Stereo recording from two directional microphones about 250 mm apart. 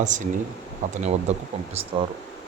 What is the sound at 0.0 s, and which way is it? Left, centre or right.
Speech, right.